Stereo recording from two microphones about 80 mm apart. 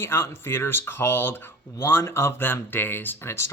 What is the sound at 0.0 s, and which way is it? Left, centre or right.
Speech, left.